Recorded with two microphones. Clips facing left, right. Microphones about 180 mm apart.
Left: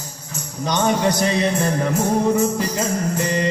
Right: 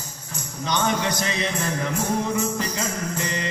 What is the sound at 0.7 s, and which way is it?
Music, 35° left (ahead or behind).